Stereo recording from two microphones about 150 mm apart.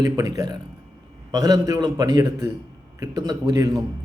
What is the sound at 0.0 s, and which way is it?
Speech, 25° right (ahead or behind).